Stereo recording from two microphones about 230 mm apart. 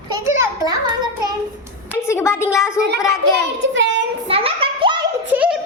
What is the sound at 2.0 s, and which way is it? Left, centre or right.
Speech, centre.